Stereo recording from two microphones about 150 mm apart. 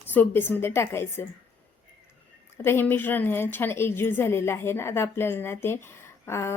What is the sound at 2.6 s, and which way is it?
A woman's voice, 15° left (ahead or behind).